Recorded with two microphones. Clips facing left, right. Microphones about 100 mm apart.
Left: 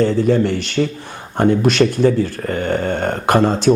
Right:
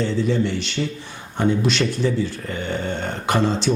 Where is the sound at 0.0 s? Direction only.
50° left (ahead or behind).